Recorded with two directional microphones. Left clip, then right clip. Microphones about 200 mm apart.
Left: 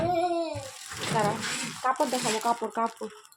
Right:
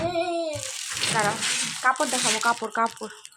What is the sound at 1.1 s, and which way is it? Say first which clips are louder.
Speech: right 2 dB; centre (ahead or behind).